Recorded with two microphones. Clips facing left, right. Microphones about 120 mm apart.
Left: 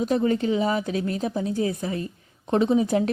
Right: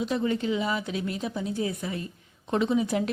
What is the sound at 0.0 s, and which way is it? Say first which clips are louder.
A woman's voice: left 5 dB; 40° left (ahead or behind).